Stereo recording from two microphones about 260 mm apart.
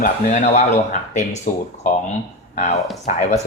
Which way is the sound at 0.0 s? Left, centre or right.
Left.